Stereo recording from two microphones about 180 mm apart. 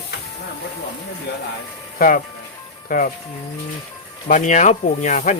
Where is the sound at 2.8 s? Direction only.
50° left (ahead or behind).